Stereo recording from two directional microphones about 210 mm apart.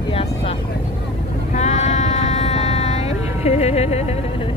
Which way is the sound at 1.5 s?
35° left (ahead or behind).